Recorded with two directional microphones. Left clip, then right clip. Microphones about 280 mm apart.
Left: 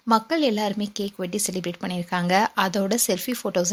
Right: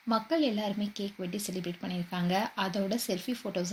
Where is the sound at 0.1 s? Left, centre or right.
Left.